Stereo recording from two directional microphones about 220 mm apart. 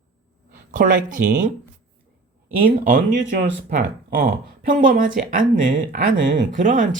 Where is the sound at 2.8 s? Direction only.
40° right (ahead or behind).